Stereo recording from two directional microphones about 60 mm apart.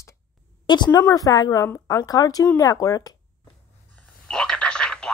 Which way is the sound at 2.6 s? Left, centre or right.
Left.